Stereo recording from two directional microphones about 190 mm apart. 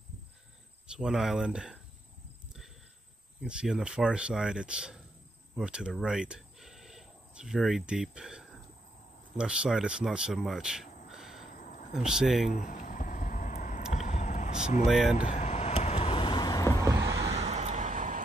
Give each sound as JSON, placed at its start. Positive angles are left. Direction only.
{"t": 0.8, "sound": "speech", "side_deg": -5}
{"t": 3.4, "sound": "speech", "side_deg": -5}
{"t": 11.1, "sound": "a sound", "side_deg": 0}
{"t": 11.5, "sound": "a sound", "side_deg": 40}
{"t": 11.9, "sound": "speech", "side_deg": -5}
{"t": 12.5, "sound": "vehicle", "side_deg": 45}
{"t": 14.9, "sound": "speech", "side_deg": 0}
{"t": 15.1, "sound": "vehicle", "side_deg": 40}
{"t": 16.8, "sound": "vehicle", "side_deg": -15}
{"t": 17.3, "sound": "vehicle", "side_deg": -35}